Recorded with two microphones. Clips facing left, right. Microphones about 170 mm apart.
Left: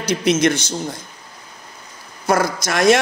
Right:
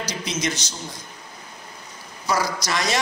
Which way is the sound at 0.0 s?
60° left (ahead or behind).